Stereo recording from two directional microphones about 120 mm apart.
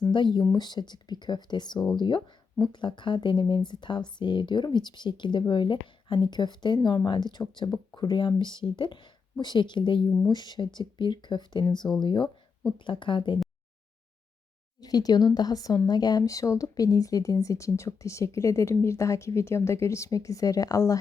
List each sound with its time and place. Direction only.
0.1 s speech: 40° left (ahead or behind)
11.8 s speech: 5° left (ahead or behind)
12.0 s speech: 40° left (ahead or behind)
14.8 s speech: 30° left (ahead or behind)